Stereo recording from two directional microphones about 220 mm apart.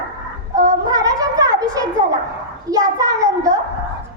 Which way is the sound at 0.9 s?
15° right (ahead or behind).